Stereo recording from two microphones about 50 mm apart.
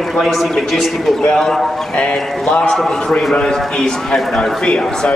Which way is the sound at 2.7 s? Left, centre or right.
Centre.